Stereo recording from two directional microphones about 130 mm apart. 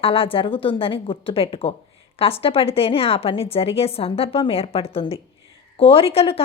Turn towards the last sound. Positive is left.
turn(degrees=50)  # may be behind; listen again after turning